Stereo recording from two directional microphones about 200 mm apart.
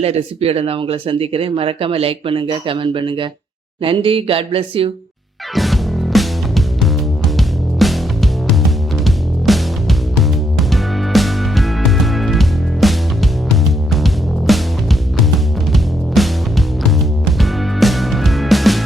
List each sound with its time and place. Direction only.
0.0 s speech: 30° right (ahead or behind)
5.5 s music: centre (ahead or behind)